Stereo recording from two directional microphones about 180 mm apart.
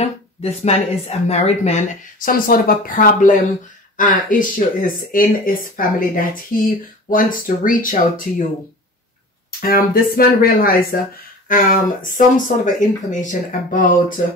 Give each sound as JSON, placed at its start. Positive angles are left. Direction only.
{"t": 0.0, "sound": "speech", "side_deg": 35}
{"t": 9.6, "sound": "speech", "side_deg": 55}